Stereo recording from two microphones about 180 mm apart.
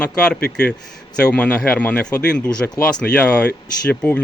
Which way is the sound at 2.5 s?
20° left (ahead or behind).